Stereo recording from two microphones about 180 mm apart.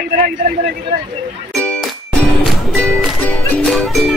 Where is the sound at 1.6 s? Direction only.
5° left (ahead or behind).